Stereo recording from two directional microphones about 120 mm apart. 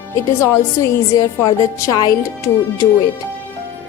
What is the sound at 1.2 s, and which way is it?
Speech, 35° left (ahead or behind).